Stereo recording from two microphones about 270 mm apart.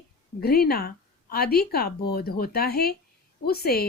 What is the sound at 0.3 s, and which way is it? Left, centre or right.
Speech, left.